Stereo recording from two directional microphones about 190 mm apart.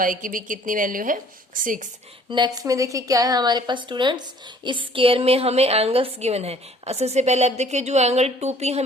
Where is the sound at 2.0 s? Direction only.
25° right (ahead or behind).